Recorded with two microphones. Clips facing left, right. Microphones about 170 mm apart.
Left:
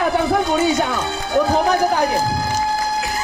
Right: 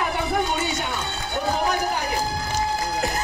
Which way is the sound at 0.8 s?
90° left.